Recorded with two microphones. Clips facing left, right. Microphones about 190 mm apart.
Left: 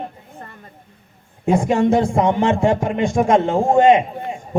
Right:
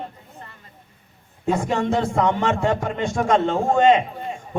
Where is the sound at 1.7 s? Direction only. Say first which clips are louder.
Left 6 dB; 15° left (ahead or behind).